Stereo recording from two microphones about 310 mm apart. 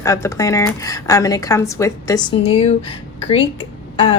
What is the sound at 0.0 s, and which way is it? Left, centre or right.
A woman's voice, centre.